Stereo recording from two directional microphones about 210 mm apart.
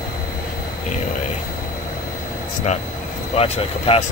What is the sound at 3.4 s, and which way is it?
Speech, 25° left (ahead or behind).